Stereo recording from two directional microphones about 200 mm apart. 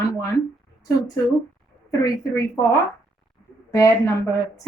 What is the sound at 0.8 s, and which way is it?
A woman's voice, 15° left (ahead or behind).